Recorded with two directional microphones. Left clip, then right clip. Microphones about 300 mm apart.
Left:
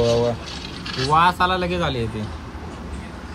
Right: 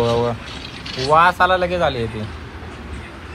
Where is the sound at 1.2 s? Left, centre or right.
Centre.